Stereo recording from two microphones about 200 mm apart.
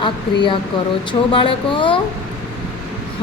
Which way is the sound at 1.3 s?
25° left (ahead or behind).